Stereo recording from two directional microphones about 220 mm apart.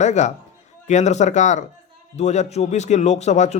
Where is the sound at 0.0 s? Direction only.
30° left (ahead or behind).